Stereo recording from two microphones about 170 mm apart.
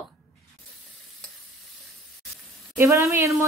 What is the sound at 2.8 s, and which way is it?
Speech, 15° right (ahead or behind).